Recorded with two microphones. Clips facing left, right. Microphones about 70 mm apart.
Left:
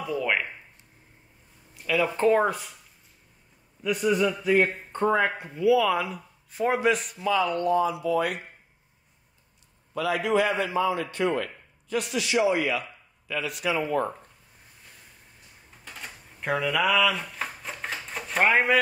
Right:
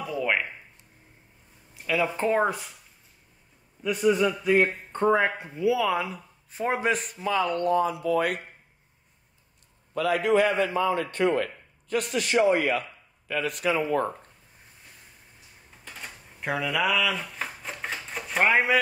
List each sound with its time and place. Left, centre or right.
0.0 s a sound: centre
1.8 s speech: right
4.2 s a man's voice: centre
5.2 s speech: right
9.9 s a man's voice: right
15.8 s typewriter: centre